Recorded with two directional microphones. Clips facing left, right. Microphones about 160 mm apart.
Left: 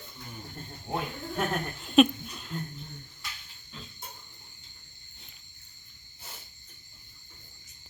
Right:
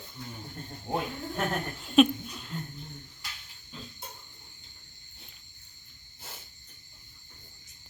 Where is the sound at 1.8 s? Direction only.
Centre (ahead or behind).